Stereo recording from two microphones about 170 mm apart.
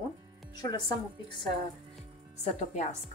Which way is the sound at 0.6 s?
25° left (ahead or behind).